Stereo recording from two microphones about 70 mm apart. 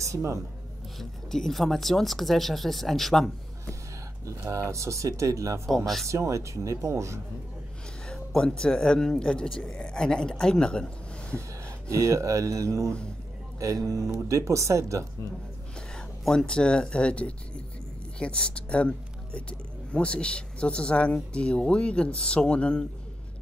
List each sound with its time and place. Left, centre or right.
0.0 s speech: right
0.9 s speech: centre
4.5 s speech: right
8.1 s speech: centre
11.9 s speech: right
16.3 s speech: centre